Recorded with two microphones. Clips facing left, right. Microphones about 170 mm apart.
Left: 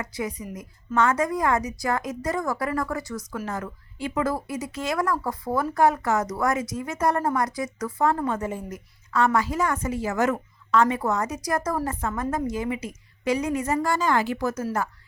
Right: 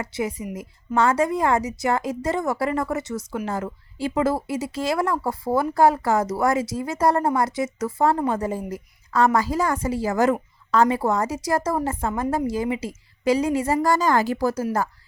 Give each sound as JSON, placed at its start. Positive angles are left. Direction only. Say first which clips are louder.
{"t": 0.0, "sound": "a woman's voice", "louder": "right 4 dB", "side_deg": -25}